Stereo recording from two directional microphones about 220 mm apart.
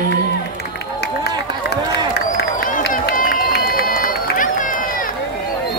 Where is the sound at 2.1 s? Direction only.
45° left (ahead or behind).